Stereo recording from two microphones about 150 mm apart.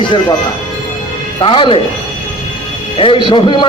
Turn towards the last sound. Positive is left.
turn(degrees=35)  # may be behind; listen again after turning